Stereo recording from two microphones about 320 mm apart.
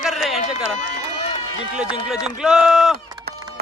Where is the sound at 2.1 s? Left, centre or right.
Centre.